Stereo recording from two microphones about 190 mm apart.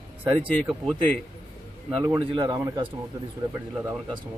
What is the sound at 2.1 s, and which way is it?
Speech, 25° right (ahead or behind).